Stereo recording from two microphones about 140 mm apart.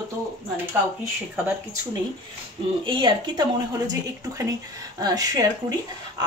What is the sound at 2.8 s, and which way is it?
Speech, 30° right (ahead or behind).